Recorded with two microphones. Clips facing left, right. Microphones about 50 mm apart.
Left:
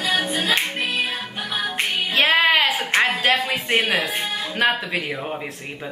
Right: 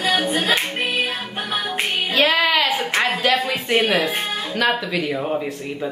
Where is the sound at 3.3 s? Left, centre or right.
Left.